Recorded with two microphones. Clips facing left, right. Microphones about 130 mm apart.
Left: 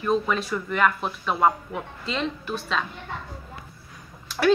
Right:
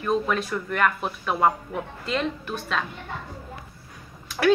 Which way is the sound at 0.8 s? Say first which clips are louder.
Left 1 dB; centre (ahead or behind).